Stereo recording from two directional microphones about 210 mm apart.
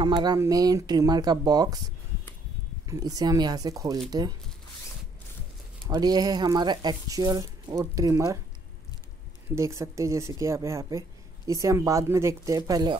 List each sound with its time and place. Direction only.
0.0 s speech: 20° right (ahead or behind)
2.9 s speech: 15° right (ahead or behind)
5.9 s speech: 20° right (ahead or behind)
9.6 s speech: 15° right (ahead or behind)